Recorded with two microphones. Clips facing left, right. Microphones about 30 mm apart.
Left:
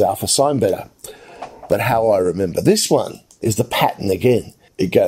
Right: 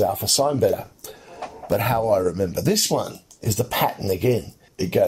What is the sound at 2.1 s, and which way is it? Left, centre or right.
Speech, left.